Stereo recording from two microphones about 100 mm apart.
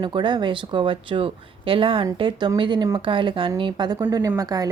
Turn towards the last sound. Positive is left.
turn(degrees=-40)  # may be behind; listen again after turning